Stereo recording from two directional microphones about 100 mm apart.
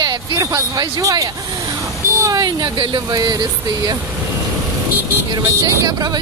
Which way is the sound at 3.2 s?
40° right (ahead or behind).